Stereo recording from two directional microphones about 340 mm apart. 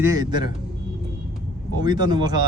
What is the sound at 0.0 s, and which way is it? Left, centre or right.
Speech, centre.